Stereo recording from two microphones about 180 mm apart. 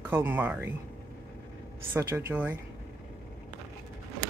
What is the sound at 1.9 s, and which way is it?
Speech, 15° right (ahead or behind).